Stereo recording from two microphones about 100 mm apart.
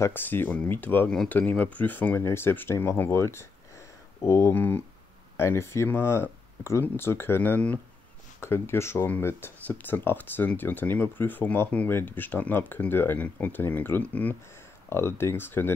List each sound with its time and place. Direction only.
0.0 s speech: 20° left (ahead or behind)
4.6 s speech: 20° left (ahead or behind)